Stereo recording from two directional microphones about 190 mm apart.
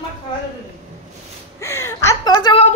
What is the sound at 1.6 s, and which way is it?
Speech, 15° left (ahead or behind).